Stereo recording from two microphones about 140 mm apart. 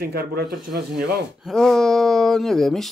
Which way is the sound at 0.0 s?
90° right.